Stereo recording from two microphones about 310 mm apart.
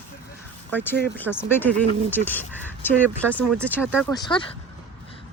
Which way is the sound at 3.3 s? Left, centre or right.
Centre.